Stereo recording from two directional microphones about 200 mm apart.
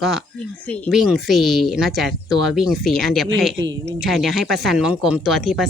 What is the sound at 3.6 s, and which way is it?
Speech, 20° right (ahead or behind).